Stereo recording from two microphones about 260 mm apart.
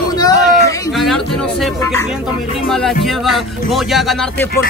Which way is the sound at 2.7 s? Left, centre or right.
Centre.